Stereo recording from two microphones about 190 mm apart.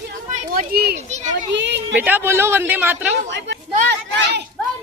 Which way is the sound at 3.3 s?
65° right (ahead or behind).